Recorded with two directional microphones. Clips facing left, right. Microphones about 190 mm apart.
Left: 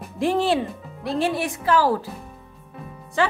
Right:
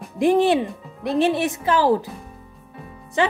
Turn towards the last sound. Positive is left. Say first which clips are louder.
# right 2 dB
turn(degrees=-20)  # may be behind; listen again after turning